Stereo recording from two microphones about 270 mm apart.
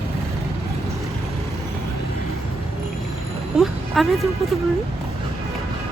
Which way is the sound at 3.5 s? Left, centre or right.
Centre.